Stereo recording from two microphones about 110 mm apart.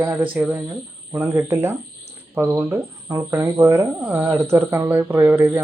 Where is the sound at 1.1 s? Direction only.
25° right (ahead or behind).